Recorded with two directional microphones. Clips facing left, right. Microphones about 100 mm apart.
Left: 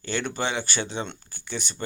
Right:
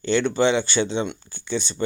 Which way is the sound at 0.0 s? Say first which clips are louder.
Right 9 dB; 25° right (ahead or behind).